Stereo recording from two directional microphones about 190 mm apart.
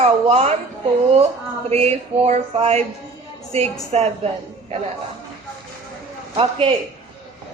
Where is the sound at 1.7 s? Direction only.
35° right (ahead or behind).